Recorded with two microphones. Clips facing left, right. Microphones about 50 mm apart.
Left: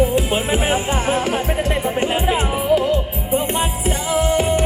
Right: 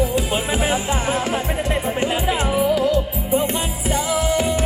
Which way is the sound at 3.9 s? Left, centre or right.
Centre.